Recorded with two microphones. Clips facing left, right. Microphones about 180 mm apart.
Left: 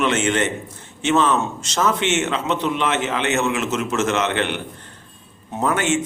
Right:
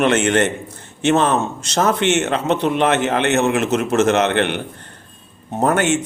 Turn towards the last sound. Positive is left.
turn(degrees=-60)  # may be behind; listen again after turning